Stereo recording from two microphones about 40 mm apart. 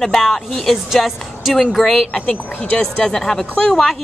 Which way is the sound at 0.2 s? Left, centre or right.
Centre.